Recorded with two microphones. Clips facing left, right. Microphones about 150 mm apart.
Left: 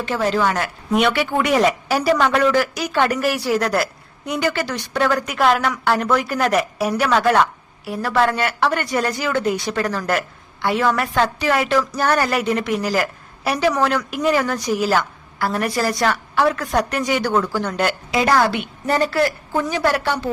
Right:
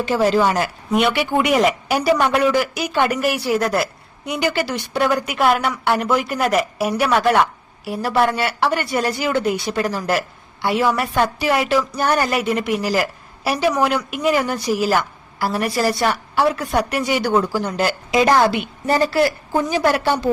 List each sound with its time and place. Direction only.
0.1 s a woman's voice: 10° right (ahead or behind)
0.9 s speech: centre (ahead or behind)
1.1 s a woman's voice: 10° right (ahead or behind)
3.3 s a woman's voice: centre (ahead or behind)
18.1 s a woman's voice: 20° right (ahead or behind)